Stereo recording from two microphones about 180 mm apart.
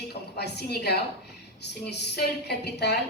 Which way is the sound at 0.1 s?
65° left (ahead or behind).